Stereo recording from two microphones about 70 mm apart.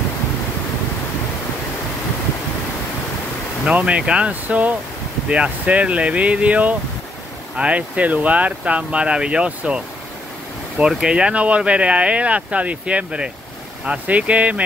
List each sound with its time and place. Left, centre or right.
3.6 s speech: centre
10.9 s speech: centre